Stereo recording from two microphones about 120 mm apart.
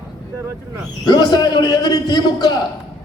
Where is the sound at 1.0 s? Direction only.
35° left (ahead or behind).